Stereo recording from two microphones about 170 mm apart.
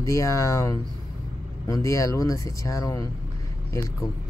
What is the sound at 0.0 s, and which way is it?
Speech, 20° left (ahead or behind).